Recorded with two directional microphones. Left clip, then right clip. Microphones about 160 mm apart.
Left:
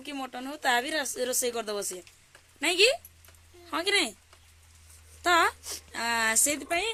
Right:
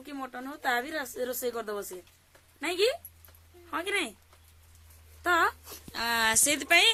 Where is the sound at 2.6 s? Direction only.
40° left (ahead or behind).